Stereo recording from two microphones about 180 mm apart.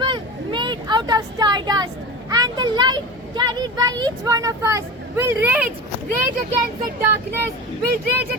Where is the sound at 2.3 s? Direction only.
20° right (ahead or behind).